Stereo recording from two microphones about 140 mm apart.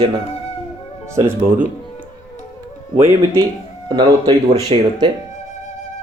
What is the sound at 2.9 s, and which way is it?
Speech, 15° right (ahead or behind).